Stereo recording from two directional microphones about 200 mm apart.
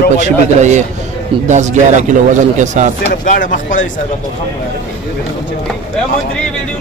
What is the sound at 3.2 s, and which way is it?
Speech, 40° left (ahead or behind).